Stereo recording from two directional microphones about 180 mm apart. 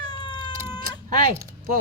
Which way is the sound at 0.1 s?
25° left (ahead or behind).